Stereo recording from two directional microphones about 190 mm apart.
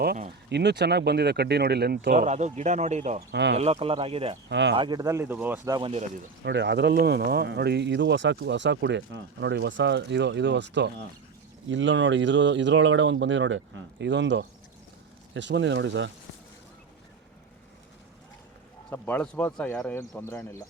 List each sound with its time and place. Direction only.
0.5 s speech: 65° right (ahead or behind)
2.1 s speech: 35° right (ahead or behind)
4.4 s speech: 65° right (ahead or behind)
4.7 s speech: 25° right (ahead or behind)
6.4 s speech: 65° right (ahead or behind)
6.9 s speech: 55° right (ahead or behind); by 16.1 s 75° right (ahead or behind)
18.9 s speech: 10° left (ahead or behind)